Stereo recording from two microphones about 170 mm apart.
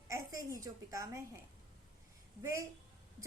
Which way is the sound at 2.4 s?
20° right (ahead or behind).